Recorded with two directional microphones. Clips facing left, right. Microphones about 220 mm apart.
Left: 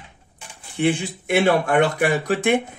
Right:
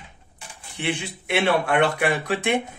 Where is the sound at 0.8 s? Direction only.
50° left (ahead or behind).